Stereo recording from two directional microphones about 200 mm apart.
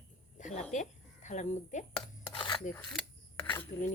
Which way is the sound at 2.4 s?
25° left (ahead or behind).